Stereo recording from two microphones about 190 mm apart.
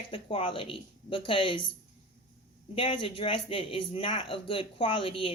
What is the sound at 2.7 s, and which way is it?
A woman's voice, 25° left (ahead or behind).